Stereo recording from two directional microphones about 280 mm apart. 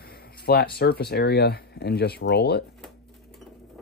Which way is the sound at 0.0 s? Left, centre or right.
Left.